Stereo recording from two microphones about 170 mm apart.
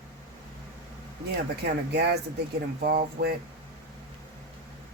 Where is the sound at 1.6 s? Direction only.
75° right (ahead or behind).